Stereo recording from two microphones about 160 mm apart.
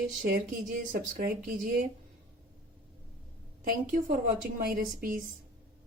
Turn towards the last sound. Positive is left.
turn(degrees=-60)  # may be behind; listen again after turning